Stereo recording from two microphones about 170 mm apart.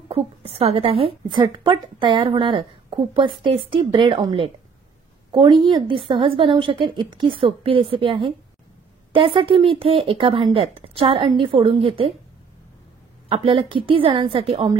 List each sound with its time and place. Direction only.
0.1 s a woman's voice: 35° right (ahead or behind)
13.3 s speech: 30° right (ahead or behind)